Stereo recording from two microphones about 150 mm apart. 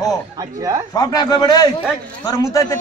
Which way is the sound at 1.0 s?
25° left (ahead or behind).